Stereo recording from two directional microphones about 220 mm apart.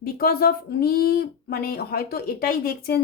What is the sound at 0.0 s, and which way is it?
A woman's voice, 45° left (ahead or behind).